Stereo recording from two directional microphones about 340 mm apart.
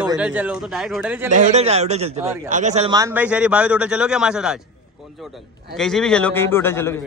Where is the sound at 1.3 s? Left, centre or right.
Centre.